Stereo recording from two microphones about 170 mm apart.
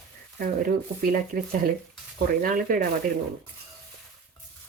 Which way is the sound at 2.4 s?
55° right (ahead or behind).